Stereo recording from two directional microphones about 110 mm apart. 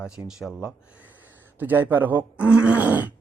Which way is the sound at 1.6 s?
15° right (ahead or behind).